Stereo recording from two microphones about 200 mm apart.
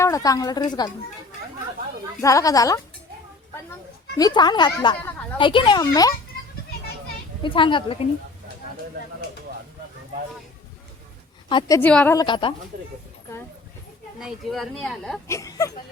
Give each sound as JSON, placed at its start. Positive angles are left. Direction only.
{"t": 0.0, "sound": "speech", "side_deg": 15}
{"t": 2.2, "sound": "a woman's voice", "side_deg": 15}
{"t": 4.2, "sound": "speech", "side_deg": 20}
{"t": 7.4, "sound": "speech", "side_deg": 25}
{"t": 11.4, "sound": "a woman's voice", "side_deg": 25}
{"t": 11.8, "sound": "a woman's voice", "side_deg": 5}
{"t": 12.1, "sound": "speech", "side_deg": 20}
{"t": 14.2, "sound": "speech", "side_deg": 0}
{"t": 15.3, "sound": "a woman's voice", "side_deg": 15}